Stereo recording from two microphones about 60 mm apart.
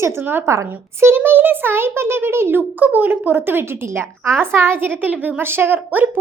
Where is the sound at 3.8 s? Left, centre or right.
Right.